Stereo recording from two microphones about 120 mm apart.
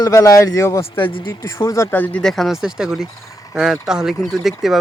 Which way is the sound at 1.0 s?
45° left (ahead or behind).